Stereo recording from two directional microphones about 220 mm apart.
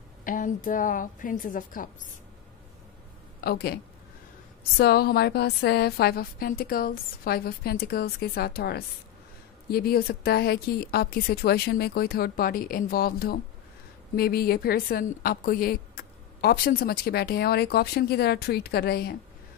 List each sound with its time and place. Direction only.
0.2 s a woman's voice: 40° left (ahead or behind)
3.3 s a woman's voice: 45° left (ahead or behind)